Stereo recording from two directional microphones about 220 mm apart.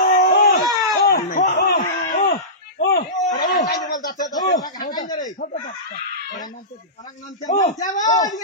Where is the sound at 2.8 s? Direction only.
45° left (ahead or behind).